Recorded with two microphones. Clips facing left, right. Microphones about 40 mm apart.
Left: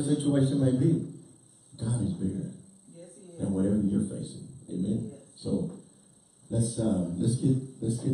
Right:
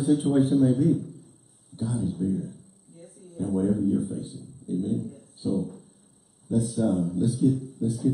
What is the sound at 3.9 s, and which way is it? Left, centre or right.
A man's voice, centre.